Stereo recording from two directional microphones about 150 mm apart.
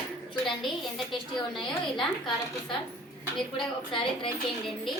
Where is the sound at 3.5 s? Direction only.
35° left (ahead or behind).